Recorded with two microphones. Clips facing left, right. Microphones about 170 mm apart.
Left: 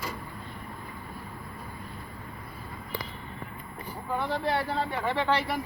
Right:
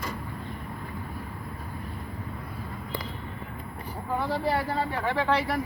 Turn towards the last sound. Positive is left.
turn(degrees=0)  # may be behind; listen again after turning